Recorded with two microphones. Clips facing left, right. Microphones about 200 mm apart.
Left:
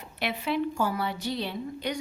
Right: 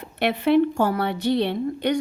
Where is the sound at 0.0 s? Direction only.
60° right (ahead or behind).